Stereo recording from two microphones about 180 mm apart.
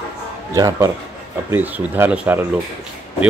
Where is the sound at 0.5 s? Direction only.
20° right (ahead or behind).